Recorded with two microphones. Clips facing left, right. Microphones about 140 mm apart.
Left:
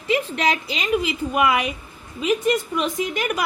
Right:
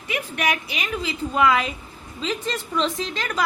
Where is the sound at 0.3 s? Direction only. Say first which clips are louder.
Left 2 dB; 25° left (ahead or behind).